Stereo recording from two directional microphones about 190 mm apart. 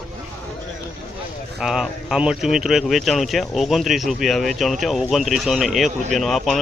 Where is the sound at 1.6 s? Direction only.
5° right (ahead or behind).